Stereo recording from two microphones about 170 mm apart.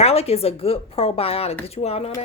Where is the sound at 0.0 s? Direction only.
35° left (ahead or behind).